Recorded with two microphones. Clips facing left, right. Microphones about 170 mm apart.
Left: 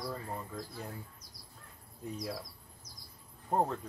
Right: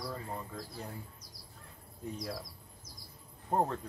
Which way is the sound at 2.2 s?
Centre (ahead or behind).